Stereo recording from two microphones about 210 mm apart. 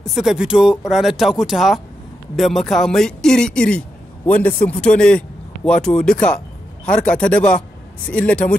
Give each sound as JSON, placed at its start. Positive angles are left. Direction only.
{"t": 0.1, "sound": "speech", "side_deg": 0}